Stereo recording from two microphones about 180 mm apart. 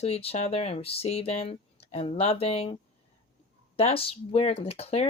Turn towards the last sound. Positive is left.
turn(degrees=35)  # may be behind; listen again after turning